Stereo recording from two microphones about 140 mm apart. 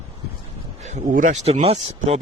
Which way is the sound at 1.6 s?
50° right (ahead or behind).